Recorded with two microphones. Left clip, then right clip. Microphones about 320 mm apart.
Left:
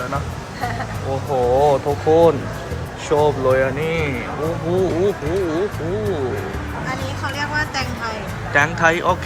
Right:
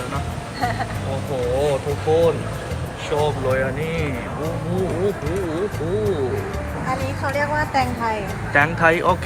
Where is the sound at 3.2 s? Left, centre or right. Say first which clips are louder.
Left 5 dB; centre.